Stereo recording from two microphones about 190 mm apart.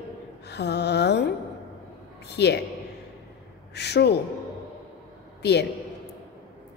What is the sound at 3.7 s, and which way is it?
Speech, 60° left (ahead or behind).